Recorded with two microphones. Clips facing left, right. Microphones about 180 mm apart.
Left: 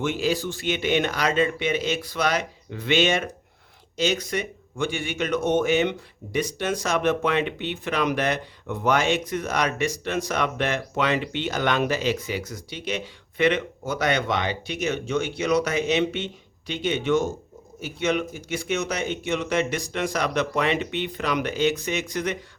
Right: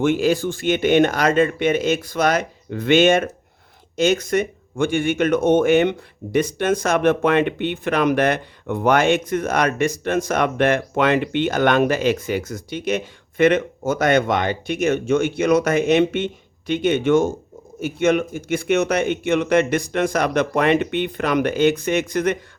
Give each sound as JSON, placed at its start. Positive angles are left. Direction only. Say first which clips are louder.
{"t": 0.0, "sound": "speech", "louder": "right 7 dB", "side_deg": -50}